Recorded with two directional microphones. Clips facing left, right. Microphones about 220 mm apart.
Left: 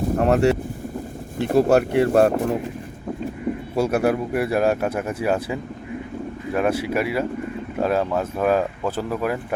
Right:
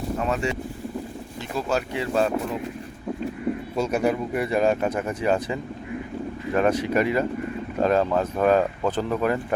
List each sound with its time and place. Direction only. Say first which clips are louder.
0.2 s a sound: left 10 dB; 65° left (ahead or behind)
1.4 s speech: left 10 dB; 60° left (ahead or behind)
3.8 s speech: left 4 dB; 5° left (ahead or behind)